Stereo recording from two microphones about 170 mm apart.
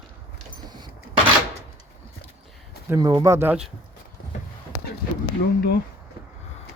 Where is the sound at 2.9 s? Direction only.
20° right (ahead or behind).